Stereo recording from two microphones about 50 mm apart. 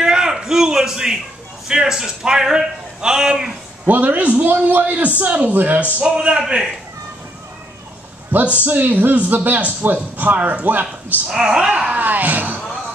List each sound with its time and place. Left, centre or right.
0.0 s a sound: centre
1.7 s speech: centre
3.8 s speech: right
6.0 s speech: centre
8.3 s speech: right
11.2 s speech: centre
11.9 s speech: right